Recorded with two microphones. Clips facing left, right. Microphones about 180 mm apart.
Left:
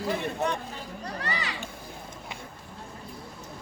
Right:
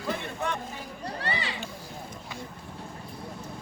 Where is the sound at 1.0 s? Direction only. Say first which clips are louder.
Right 2 dB; 30° right (ahead or behind).